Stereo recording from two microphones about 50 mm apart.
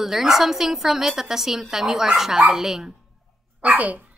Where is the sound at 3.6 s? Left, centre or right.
Right.